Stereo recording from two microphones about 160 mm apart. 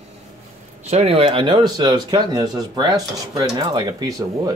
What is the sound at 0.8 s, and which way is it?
Speech, 40° right (ahead or behind).